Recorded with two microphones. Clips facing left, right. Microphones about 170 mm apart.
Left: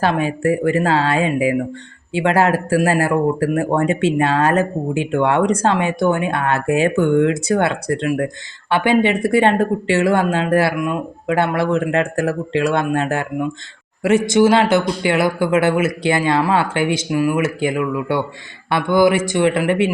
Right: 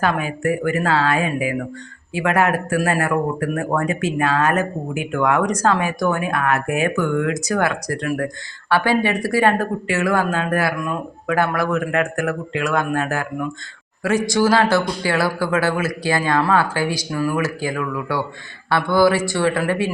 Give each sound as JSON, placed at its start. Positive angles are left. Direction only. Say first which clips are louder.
{"t": 0.0, "sound": "speech", "louder": "left 3 dB", "side_deg": 30}